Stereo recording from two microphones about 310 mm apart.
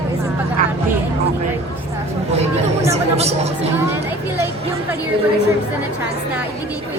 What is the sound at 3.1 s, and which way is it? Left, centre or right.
Speech, centre.